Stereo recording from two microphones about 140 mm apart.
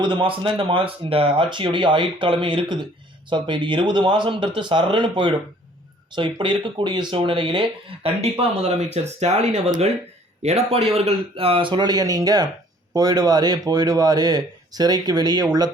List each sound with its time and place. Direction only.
0.0 s speech: 35° right (ahead or behind)